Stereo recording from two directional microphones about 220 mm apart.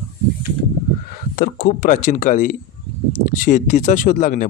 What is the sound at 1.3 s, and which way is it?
Speech, 40° left (ahead or behind).